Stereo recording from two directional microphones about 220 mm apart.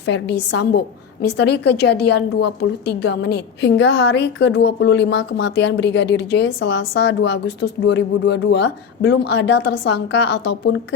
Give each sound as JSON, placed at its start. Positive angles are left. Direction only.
{"t": 0.0, "sound": "a woman's voice", "side_deg": 50}